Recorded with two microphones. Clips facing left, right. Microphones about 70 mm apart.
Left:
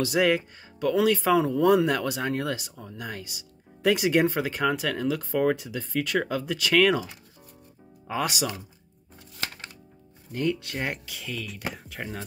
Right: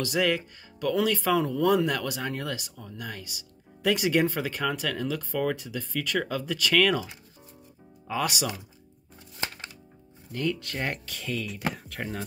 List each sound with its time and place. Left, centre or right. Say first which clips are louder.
0.0 s speech: left 3 dB; left
1.9 s speech: left 3 dB; left
8.1 s speech: left 1 dB; left
10.3 s speech: left 2 dB; left; by 12.3 s centre